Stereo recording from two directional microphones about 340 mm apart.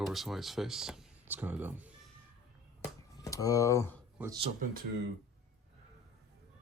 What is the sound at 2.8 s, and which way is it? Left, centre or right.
Finger snapping, centre.